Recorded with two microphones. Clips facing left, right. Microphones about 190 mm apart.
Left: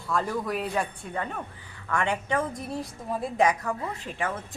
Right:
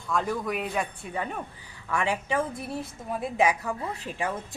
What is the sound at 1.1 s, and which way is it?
A woman's voice, 15° right (ahead or behind).